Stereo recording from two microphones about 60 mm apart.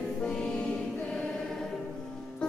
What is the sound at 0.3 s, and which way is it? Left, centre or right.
Music, centre.